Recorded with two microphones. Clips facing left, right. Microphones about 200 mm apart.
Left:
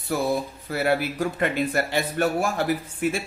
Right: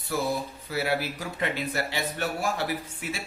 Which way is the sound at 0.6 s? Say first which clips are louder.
Left 5 dB; 50° left (ahead or behind).